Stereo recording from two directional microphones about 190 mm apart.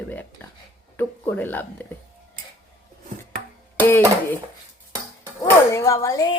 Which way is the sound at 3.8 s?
10° left (ahead or behind).